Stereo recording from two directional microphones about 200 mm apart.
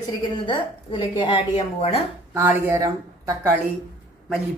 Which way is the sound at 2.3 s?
10° right (ahead or behind).